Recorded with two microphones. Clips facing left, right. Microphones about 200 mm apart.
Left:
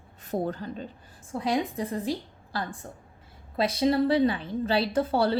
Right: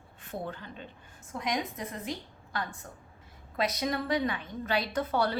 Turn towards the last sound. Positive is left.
turn(degrees=30)  # may be behind; listen again after turning